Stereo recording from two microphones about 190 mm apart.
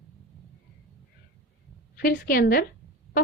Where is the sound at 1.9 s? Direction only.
50° left (ahead or behind).